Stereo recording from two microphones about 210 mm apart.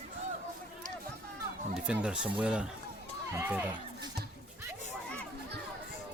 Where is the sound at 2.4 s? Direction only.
5° right (ahead or behind).